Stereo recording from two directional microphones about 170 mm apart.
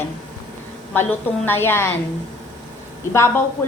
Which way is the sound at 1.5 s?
15° left (ahead or behind).